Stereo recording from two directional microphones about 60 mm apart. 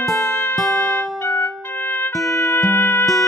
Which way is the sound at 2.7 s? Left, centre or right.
Left.